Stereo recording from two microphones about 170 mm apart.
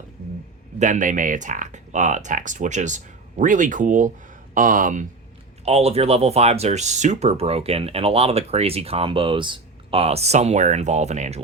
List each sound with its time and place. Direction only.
0.8 s speech: 50° right (ahead or behind)
5.6 s speech: 40° right (ahead or behind)